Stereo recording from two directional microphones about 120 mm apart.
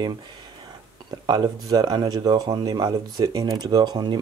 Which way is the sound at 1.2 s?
35° right (ahead or behind).